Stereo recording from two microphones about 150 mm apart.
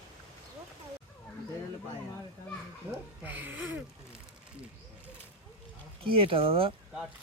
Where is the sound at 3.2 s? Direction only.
10° right (ahead or behind).